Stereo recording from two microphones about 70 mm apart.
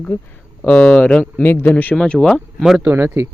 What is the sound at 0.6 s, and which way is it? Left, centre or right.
Speech, centre.